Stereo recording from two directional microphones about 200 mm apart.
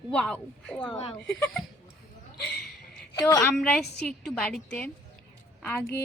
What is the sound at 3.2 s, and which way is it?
Speech, 15° left (ahead or behind).